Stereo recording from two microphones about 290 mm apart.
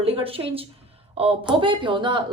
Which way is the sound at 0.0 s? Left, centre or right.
Centre.